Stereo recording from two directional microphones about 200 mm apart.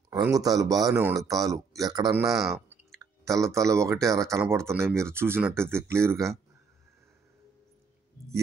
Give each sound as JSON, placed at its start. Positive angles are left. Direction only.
{"t": 0.1, "sound": "speech", "side_deg": -15}
{"t": 2.2, "sound": "speech", "side_deg": 0}
{"t": 3.0, "sound": "clicking", "side_deg": -15}
{"t": 3.5, "sound": "speech", "side_deg": -15}